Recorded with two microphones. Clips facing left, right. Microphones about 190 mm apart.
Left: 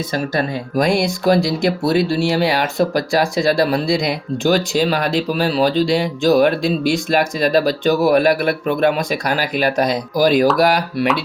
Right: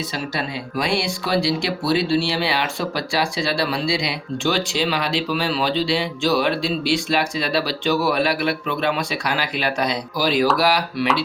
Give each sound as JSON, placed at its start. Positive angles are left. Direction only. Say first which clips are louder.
{"t": 0.1, "sound": "speech", "louder": "left 6 dB", "side_deg": 45}